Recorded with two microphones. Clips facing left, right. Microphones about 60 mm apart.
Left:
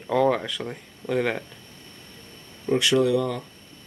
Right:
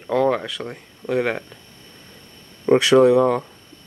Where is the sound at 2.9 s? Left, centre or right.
Right.